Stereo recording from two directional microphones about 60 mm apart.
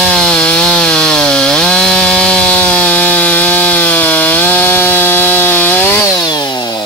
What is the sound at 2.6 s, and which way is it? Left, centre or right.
Wood, left.